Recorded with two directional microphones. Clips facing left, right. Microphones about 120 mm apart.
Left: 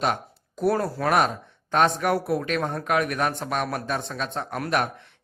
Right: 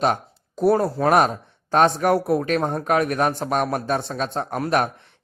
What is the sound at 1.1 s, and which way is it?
A man's voice, 40° right (ahead or behind).